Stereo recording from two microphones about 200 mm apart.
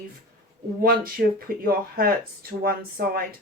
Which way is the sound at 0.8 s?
45° right (ahead or behind).